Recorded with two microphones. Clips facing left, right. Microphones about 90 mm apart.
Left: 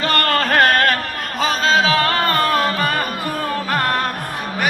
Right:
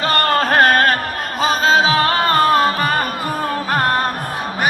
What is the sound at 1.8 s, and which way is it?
Music, 25° right (ahead or behind).